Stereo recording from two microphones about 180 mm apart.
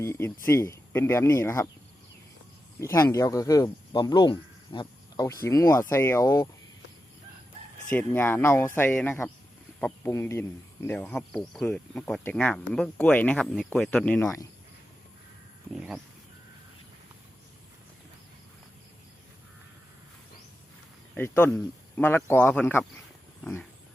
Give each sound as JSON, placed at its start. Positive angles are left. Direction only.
{"t": 0.0, "sound": "speech", "side_deg": 15}
{"t": 2.8, "sound": "speech", "side_deg": 20}
{"t": 7.9, "sound": "speech", "side_deg": 10}
{"t": 21.2, "sound": "speech", "side_deg": 10}